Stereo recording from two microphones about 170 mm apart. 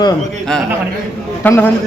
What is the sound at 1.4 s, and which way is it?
Speech, 10° left (ahead or behind).